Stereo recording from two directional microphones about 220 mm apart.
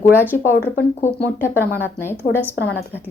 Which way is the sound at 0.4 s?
10° left (ahead or behind).